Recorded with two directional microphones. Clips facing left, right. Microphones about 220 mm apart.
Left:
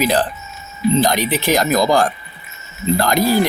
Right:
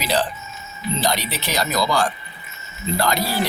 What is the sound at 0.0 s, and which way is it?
Speech, 50° left (ahead or behind).